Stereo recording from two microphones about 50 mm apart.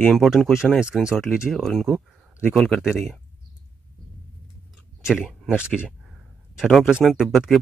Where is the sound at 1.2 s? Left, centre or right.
Centre.